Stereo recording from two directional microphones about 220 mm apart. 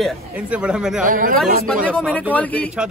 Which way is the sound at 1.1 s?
40° right (ahead or behind).